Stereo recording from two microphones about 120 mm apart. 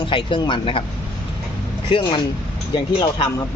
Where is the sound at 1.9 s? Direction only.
45° left (ahead or behind).